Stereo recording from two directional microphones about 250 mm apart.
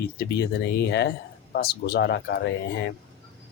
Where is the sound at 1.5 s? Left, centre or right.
Left.